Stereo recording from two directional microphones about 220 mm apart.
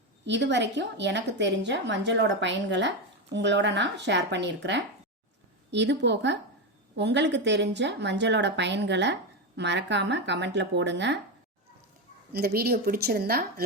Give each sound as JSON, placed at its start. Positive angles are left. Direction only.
{"t": 0.3, "sound": "a woman's voice", "side_deg": -50}
{"t": 12.3, "sound": "a woman's voice", "side_deg": -45}